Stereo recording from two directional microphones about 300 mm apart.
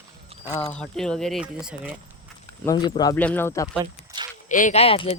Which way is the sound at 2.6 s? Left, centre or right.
Centre.